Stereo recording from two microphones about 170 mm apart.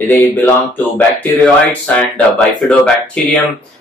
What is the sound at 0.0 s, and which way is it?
Speech, 10° left (ahead or behind).